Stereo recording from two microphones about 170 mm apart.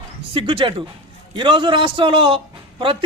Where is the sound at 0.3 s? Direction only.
30° right (ahead or behind).